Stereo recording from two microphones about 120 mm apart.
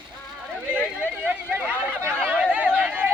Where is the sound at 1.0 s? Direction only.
15° right (ahead or behind).